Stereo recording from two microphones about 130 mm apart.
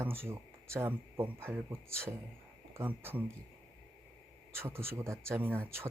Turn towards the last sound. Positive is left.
turn(degrees=-15)  # may be behind; listen again after turning